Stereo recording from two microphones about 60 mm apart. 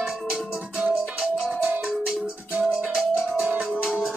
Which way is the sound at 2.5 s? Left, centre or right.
Centre.